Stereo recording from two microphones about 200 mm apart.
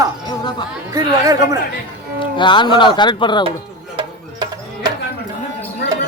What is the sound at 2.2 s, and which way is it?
Speech, 25° left (ahead or behind).